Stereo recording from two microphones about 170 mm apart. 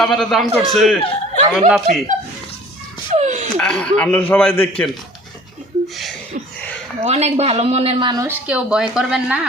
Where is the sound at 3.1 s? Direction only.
40° right (ahead or behind).